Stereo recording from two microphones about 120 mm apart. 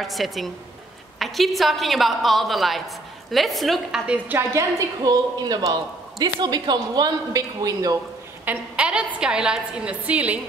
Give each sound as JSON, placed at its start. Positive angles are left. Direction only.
{"t": 0.0, "sound": "a woman's voice", "side_deg": 0}
{"t": 4.4, "sound": "a woman's voice", "side_deg": -25}
{"t": 8.5, "sound": "a woman's voice", "side_deg": -10}